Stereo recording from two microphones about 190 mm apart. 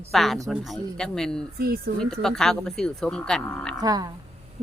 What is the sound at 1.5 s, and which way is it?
Speech, 55° right (ahead or behind).